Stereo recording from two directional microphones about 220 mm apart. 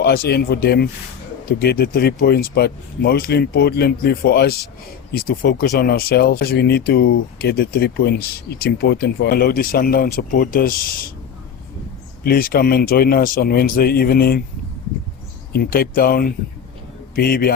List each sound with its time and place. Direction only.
0.0 s speech: 45° left (ahead or behind)
12.2 s speech: 40° left (ahead or behind)
15.5 s speech: 40° left (ahead or behind)